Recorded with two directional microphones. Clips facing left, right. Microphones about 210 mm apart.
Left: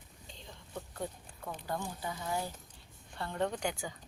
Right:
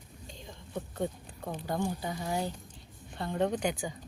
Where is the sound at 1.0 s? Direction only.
25° right (ahead or behind).